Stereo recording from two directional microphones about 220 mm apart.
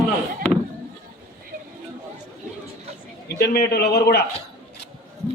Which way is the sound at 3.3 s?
50° left (ahead or behind).